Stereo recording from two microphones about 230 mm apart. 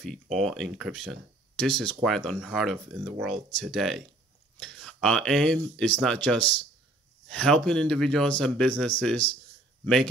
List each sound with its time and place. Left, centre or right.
0.0 s speech: centre